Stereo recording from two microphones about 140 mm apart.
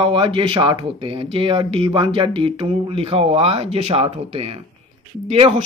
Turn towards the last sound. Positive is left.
turn(degrees=-45)  # may be behind; listen again after turning